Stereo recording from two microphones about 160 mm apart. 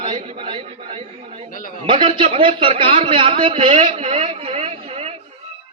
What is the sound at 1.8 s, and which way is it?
A man's voice, 35° right (ahead or behind).